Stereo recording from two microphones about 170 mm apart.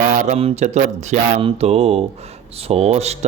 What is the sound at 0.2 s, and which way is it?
Speech, 40° right (ahead or behind).